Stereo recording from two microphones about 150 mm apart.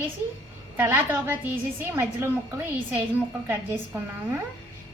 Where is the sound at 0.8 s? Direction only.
15° right (ahead or behind).